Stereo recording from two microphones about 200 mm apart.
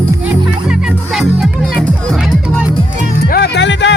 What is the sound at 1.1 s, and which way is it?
Speech, centre (ahead or behind).